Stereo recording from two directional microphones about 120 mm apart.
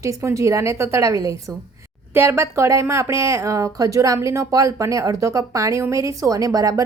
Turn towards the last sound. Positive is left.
turn(degrees=-30)  # may be behind; listen again after turning